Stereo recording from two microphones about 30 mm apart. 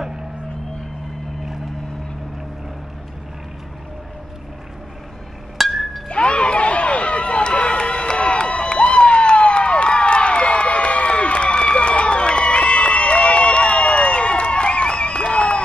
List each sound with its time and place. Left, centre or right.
5.6 s chink: centre
6.0 s a sound: left
10.4 s crowd: left
11.5 s crowd: left